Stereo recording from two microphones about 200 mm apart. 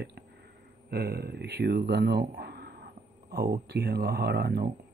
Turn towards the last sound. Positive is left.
turn(degrees=-55)  # may be behind; listen again after turning